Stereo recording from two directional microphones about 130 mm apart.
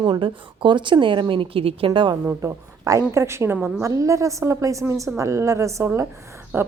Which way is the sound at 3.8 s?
25° right (ahead or behind).